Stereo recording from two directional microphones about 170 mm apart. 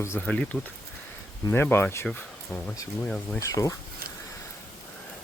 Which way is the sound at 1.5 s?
10° left (ahead or behind).